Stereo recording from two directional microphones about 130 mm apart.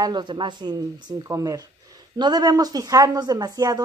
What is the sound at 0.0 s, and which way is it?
Speech, 35° right (ahead or behind).